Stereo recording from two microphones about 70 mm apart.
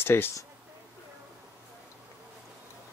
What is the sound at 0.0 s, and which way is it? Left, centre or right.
Speech, left.